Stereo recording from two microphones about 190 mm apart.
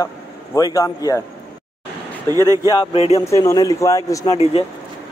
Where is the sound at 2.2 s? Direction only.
20° right (ahead or behind).